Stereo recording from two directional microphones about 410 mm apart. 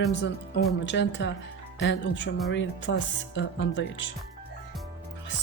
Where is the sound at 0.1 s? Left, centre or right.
Left.